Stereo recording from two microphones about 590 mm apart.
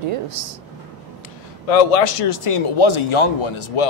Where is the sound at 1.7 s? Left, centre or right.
Left.